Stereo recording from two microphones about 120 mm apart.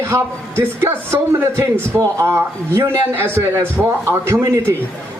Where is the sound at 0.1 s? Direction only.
20° right (ahead or behind).